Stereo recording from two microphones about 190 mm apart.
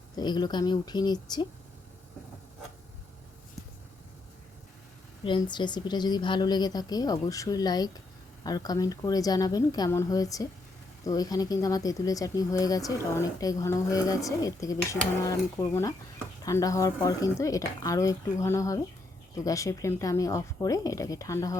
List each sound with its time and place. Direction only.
0.2 s speech: 20° left (ahead or behind)
5.2 s speech: 25° left (ahead or behind)